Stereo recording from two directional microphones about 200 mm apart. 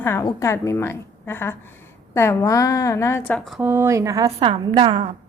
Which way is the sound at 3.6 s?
10° right (ahead or behind).